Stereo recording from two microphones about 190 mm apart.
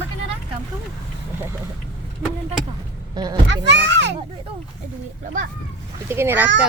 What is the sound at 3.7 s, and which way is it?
Speech, 65° right (ahead or behind).